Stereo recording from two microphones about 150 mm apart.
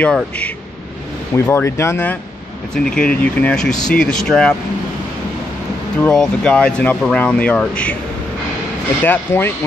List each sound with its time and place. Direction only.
0.0 s speech: 10° left (ahead or behind)
2.7 s speech: 5° left (ahead or behind)
6.0 s speech: 5° left (ahead or behind)
9.0 s speech: 10° left (ahead or behind)